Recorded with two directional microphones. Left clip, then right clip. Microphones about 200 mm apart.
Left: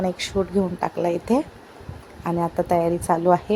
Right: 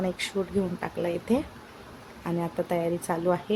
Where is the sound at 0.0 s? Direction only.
15° left (ahead or behind).